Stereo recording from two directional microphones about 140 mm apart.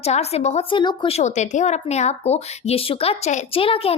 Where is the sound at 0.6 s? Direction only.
35° left (ahead or behind).